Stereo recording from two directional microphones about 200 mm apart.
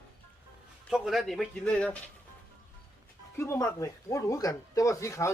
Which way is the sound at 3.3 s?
15° left (ahead or behind).